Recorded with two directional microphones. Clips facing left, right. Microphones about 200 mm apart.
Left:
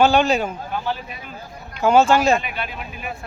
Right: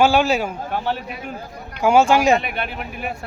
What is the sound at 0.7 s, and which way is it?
Speech, 65° right (ahead or behind).